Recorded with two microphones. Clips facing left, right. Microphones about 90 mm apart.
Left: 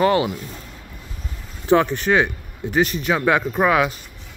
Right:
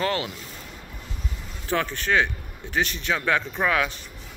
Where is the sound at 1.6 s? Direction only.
20° left (ahead or behind).